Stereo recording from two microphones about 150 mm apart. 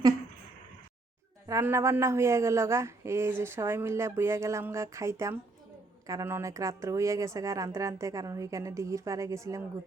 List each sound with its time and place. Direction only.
1.5 s a woman's voice: 20° right (ahead or behind)